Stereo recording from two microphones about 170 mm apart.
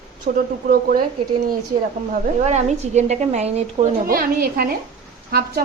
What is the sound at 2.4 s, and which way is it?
A woman's voice, 40° right (ahead or behind).